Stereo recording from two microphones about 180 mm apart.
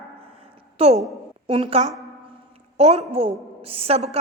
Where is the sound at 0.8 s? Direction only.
35° right (ahead or behind).